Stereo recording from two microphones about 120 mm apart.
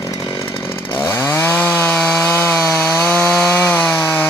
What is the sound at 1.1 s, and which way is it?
Chainsaw, 20° left (ahead or behind).